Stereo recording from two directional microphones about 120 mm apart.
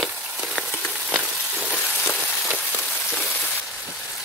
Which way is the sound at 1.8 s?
15° left (ahead or behind).